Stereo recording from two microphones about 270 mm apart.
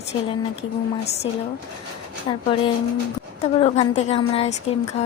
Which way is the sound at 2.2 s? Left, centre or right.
Centre.